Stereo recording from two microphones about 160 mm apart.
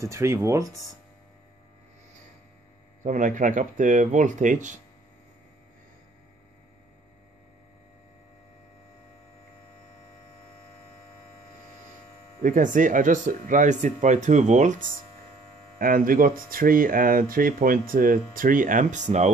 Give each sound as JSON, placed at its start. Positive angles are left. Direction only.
{"t": 0.0, "sound": "speech", "side_deg": -20}
{"t": 3.0, "sound": "speech", "side_deg": -50}
{"t": 12.4, "sound": "speech", "side_deg": -55}
{"t": 15.8, "sound": "speech", "side_deg": -60}